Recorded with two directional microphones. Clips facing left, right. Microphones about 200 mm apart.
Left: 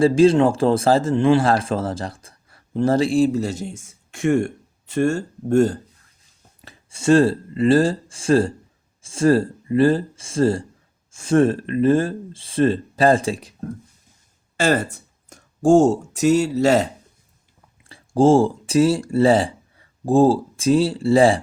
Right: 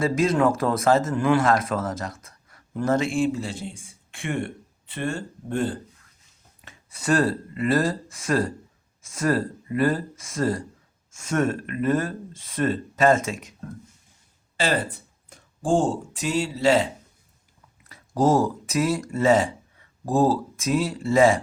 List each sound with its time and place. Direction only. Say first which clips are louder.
0.0 s speech: left 7 dB; 30° left (ahead or behind)
6.7 s speech: left 7 dB; 25° left (ahead or behind)
14.5 s speech: left 5 dB; 45° left (ahead or behind)
17.8 s speech: left 6 dB; 30° left (ahead or behind)